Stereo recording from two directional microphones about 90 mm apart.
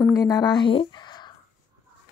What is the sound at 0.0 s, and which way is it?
Speech, 40° left (ahead or behind).